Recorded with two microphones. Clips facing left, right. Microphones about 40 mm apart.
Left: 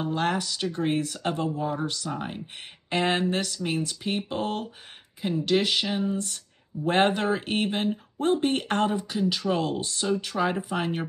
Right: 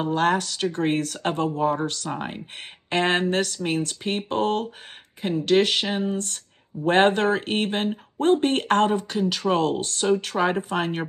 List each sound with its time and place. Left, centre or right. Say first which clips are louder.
0.2 s speech: right 6 dB; right
2.1 s speech: right 2 dB; right
2.9 s speech: right 3 dB; right
6.1 s speech: right 2 dB; right